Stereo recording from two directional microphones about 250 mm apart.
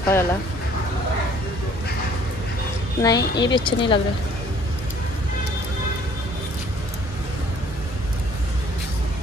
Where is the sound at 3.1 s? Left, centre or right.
Left.